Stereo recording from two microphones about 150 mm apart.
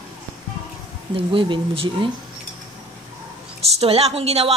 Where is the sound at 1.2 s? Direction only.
35° right (ahead or behind).